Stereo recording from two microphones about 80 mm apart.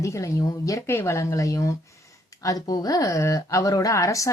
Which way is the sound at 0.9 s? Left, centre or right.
Left.